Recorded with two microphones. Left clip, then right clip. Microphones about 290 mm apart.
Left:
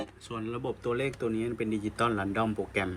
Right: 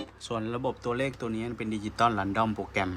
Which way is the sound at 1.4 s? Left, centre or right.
Right.